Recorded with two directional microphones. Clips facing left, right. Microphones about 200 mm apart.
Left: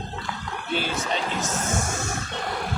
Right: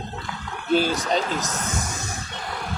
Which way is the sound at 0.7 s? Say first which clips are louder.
Right 7 dB; 40° right (ahead or behind).